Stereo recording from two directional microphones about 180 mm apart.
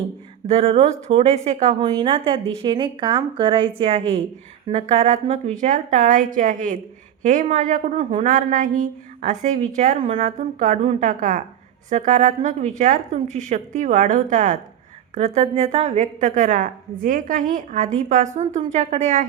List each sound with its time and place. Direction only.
0.4 s speech: 30° right (ahead or behind)
1.8 s a woman's voice: 25° right (ahead or behind); by 7.9 s 45° right (ahead or behind)
7.9 s speech: 35° right (ahead or behind)
8.3 s a woman's voice: 45° right (ahead or behind)